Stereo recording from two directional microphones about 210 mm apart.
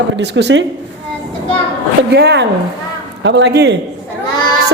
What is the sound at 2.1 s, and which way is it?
A woman's voice, 50° right (ahead or behind).